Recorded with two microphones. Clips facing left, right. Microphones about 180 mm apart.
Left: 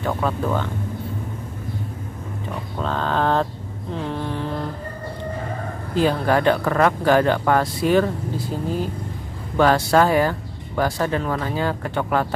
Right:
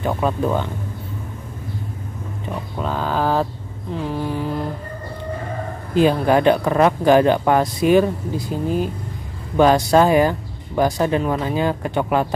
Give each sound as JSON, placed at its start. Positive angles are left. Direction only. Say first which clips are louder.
{"t": 0.0, "sound": "speech", "louder": "right 3 dB", "side_deg": -15}
{"t": 2.8, "sound": "speech", "louder": "even", "side_deg": -10}
{"t": 3.9, "sound": "a sound", "louder": "right 3 dB", "side_deg": -5}
{"t": 5.9, "sound": "speech", "louder": "right 4 dB", "side_deg": -15}